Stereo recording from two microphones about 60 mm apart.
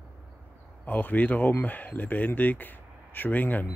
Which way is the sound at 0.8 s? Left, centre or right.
Left.